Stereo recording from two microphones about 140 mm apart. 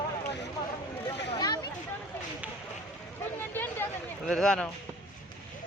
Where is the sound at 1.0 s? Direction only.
30° left (ahead or behind).